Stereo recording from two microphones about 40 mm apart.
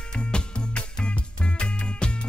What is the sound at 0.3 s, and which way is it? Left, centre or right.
Music, left.